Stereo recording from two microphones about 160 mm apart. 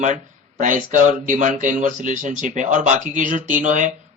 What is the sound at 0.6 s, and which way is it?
Speech, 55° right (ahead or behind).